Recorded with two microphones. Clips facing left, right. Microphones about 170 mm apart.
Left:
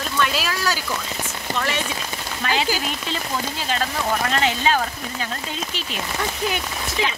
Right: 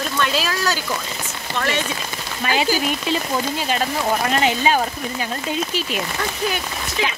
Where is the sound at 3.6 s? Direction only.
15° right (ahead or behind).